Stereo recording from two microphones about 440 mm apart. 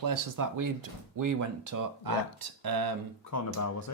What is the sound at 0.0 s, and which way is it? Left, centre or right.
Speech, right.